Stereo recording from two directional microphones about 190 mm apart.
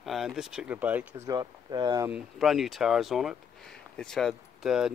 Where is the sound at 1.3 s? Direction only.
20° right (ahead or behind).